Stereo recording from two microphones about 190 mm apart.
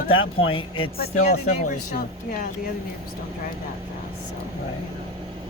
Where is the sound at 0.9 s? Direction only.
45° left (ahead or behind).